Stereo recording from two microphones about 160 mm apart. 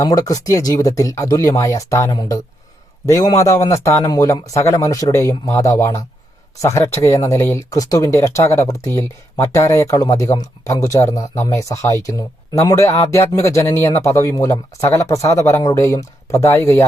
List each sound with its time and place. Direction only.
0.0 s speech: 25° left (ahead or behind)